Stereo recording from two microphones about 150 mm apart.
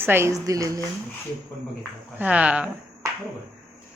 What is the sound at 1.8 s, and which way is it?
Speech, 10° right (ahead or behind).